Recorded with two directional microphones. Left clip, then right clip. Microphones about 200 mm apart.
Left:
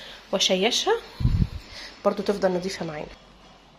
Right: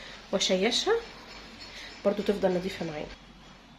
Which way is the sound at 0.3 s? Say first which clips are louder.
Left 4 dB; 10° left (ahead or behind).